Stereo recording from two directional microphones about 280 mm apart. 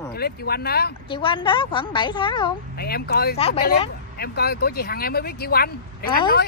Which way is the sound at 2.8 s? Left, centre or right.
Left.